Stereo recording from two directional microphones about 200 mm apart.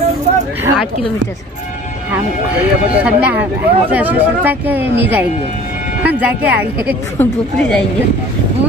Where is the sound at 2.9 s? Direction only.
5° right (ahead or behind).